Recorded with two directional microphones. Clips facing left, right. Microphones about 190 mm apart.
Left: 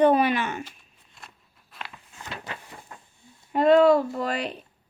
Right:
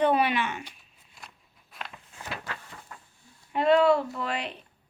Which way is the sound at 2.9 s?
25° left (ahead or behind).